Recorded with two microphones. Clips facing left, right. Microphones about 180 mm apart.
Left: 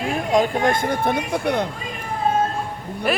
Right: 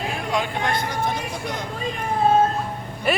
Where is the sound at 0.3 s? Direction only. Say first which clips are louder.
Left 7 dB; 45° left (ahead or behind).